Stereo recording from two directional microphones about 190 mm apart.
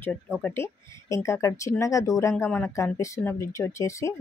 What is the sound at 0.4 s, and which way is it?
Speech, 10° left (ahead or behind).